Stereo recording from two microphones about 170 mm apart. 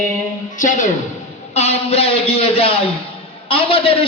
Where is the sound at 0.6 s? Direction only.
50° left (ahead or behind).